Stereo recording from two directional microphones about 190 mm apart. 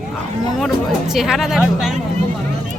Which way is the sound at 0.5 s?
Centre (ahead or behind).